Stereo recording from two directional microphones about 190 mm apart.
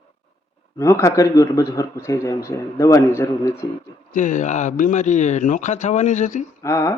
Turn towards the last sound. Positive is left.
turn(degrees=15)  # may be behind; listen again after turning